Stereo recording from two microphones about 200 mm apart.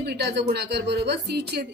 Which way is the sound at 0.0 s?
55° right (ahead or behind).